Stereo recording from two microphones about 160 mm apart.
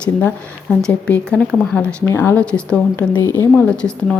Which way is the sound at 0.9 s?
10° left (ahead or behind).